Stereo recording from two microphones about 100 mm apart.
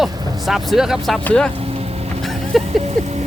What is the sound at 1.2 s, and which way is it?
Speech, 10° left (ahead or behind).